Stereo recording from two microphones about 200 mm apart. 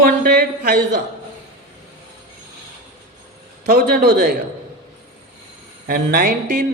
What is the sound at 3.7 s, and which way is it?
Speech, 55° right (ahead or behind).